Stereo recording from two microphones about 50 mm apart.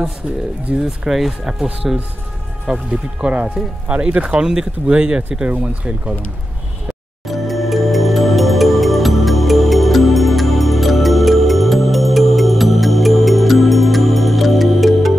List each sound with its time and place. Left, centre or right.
0.7 s speech: centre
1.8 s speech: right
7.2 s music: centre